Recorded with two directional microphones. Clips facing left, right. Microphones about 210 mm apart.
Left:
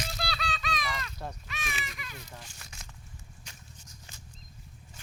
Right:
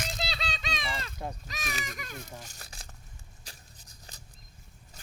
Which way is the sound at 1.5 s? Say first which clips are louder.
Right 2 dB; 40° right (ahead or behind).